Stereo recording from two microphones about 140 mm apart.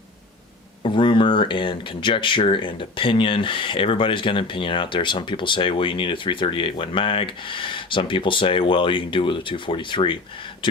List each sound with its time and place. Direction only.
0.8 s speech: 35° left (ahead or behind)